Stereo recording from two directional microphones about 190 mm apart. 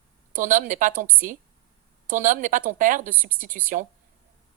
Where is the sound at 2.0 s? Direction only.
45° right (ahead or behind).